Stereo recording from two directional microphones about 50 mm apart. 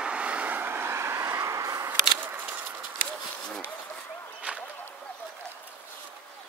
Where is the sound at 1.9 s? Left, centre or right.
Right.